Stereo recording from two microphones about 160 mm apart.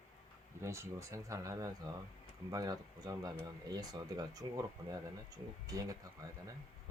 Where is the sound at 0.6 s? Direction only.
15° right (ahead or behind).